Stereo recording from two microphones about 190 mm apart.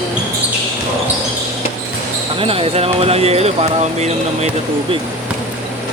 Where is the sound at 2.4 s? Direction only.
30° right (ahead or behind).